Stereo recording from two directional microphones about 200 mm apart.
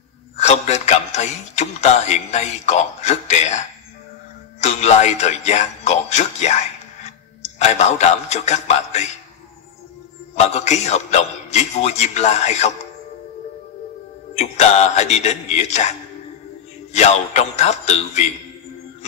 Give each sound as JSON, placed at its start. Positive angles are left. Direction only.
{"t": 0.4, "sound": "speech", "side_deg": 35}
{"t": 10.3, "sound": "speech", "side_deg": 35}
{"t": 14.3, "sound": "speech", "side_deg": 35}
{"t": 16.9, "sound": "speech", "side_deg": 35}